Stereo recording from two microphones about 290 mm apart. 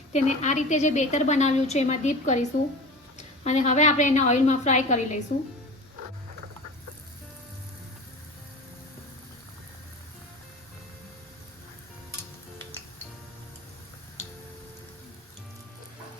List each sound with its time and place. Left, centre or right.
0.1 s a woman's voice: left